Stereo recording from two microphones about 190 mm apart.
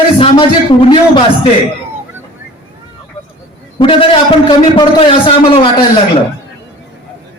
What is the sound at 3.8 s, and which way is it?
A man's voice, 25° left (ahead or behind).